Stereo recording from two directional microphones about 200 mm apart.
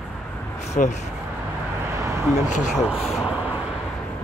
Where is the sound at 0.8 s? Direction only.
40° left (ahead or behind).